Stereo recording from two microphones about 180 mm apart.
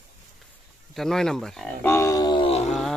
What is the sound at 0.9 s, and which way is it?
Speech, centre (ahead or behind).